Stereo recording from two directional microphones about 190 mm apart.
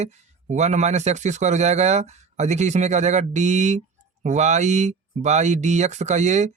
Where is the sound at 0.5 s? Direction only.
40° right (ahead or behind).